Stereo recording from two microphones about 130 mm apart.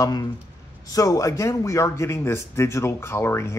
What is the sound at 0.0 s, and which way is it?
Speech, 30° left (ahead or behind).